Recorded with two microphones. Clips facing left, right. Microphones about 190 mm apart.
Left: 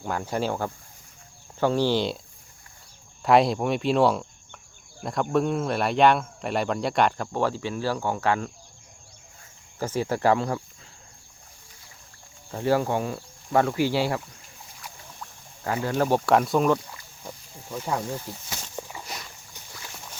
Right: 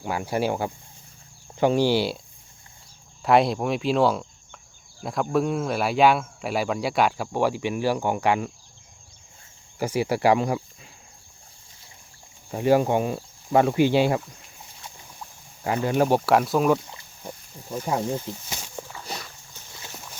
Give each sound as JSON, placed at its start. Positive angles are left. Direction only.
{"t": 0.0, "sound": "speech", "side_deg": -10}
{"t": 3.2, "sound": "speech", "side_deg": 0}
{"t": 9.7, "sound": "speech", "side_deg": -10}
{"t": 12.5, "sound": "speech", "side_deg": -15}
{"t": 14.8, "sound": "rowboat", "side_deg": -20}
{"t": 17.7, "sound": "speech", "side_deg": -20}